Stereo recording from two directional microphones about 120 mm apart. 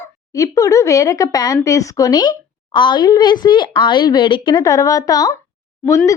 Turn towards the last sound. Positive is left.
turn(degrees=25)  # may be behind; listen again after turning